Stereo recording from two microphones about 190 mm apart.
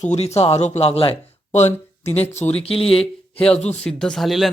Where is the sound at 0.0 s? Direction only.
35° left (ahead or behind).